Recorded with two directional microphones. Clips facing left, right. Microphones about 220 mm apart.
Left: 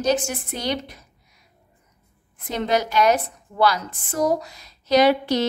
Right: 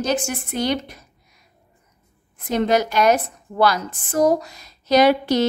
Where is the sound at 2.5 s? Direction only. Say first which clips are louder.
Right 3 dB; 45° right (ahead or behind).